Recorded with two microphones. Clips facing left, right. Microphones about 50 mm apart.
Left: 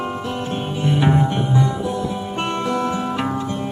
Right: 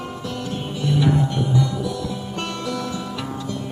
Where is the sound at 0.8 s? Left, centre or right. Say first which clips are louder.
Left 2 dB; left.